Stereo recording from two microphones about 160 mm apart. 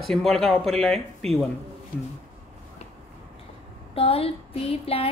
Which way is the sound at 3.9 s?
35° left (ahead or behind).